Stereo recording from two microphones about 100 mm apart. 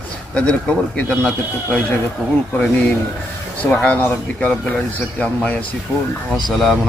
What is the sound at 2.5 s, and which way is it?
A man's voice, 15° left (ahead or behind).